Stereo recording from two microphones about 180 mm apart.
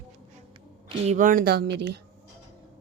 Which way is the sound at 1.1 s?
50° right (ahead or behind).